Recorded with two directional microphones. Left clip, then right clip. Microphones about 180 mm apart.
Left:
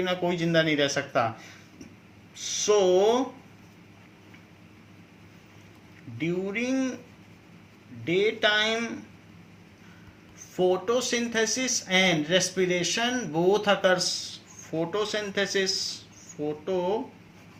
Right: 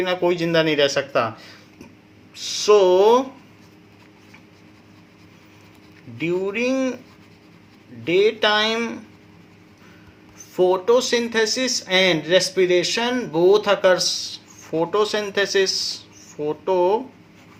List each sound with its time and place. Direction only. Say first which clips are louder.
0.0 s speech: right 7 dB; 45° right (ahead or behind)
2.3 s speech: right 8 dB; 50° right (ahead or behind)
6.1 s speech: right 7 dB; 55° right (ahead or behind)
8.0 s speech: right 6 dB; 55° right (ahead or behind)
10.5 s speech: right 8 dB; 50° right (ahead or behind)